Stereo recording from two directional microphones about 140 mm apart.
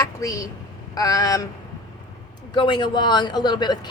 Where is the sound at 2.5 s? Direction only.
35° left (ahead or behind).